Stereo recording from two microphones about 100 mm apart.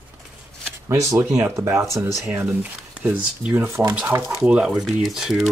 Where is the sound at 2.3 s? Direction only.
15° right (ahead or behind).